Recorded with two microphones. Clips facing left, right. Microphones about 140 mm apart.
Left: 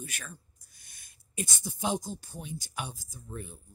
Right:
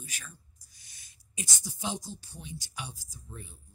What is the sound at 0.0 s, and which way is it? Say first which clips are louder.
Speech: left 5 dB; 55° left (ahead or behind).